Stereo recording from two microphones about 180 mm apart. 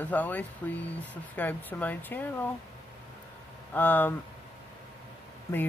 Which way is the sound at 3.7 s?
10° left (ahead or behind).